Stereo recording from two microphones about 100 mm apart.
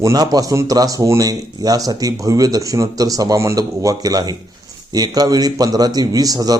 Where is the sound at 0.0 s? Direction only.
35° right (ahead or behind).